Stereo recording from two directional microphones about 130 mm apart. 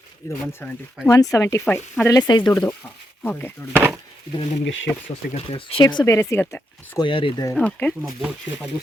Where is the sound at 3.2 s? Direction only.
15° left (ahead or behind).